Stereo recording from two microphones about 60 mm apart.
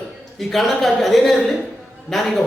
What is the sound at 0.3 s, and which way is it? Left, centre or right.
Speech, centre.